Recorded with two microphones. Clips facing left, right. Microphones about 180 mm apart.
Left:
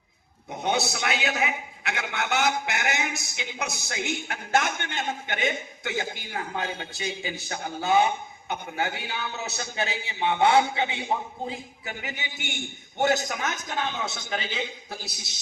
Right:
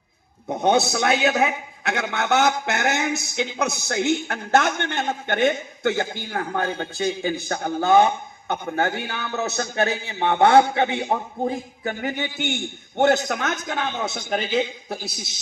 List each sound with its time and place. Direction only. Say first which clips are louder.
0.4 s a man's voice: right 7 dB; 55° right (ahead or behind)